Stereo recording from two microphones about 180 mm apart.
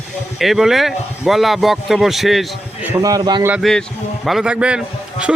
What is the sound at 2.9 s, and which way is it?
Speech, 20° right (ahead or behind).